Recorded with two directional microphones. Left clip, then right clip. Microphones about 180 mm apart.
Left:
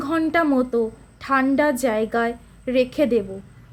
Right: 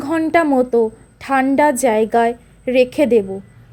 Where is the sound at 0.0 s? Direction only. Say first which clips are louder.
Right 5 dB; 25° right (ahead or behind).